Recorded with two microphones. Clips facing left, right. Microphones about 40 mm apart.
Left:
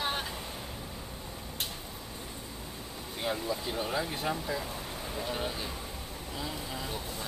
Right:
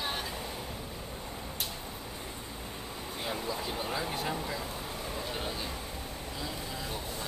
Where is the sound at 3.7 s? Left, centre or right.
Centre.